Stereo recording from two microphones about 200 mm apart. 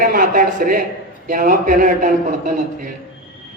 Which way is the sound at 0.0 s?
45° right (ahead or behind).